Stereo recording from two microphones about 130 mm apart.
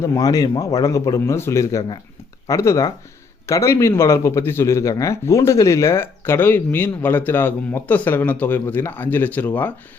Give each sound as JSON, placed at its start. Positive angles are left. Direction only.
{"t": 0.0, "sound": "speech", "side_deg": 25}